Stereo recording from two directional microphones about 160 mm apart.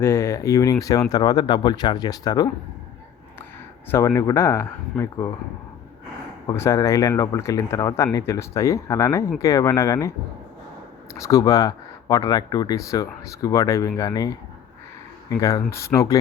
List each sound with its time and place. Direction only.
0.0 s speech: 15° left (ahead or behind)
3.9 s speech: 20° left (ahead or behind)
6.5 s speech: 20° left (ahead or behind)
11.1 s speech: 20° left (ahead or behind)